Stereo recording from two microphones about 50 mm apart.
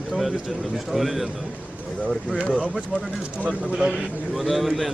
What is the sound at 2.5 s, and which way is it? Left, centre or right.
Speech, right.